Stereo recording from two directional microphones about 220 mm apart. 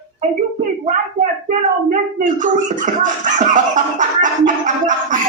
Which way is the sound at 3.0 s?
35° right (ahead or behind).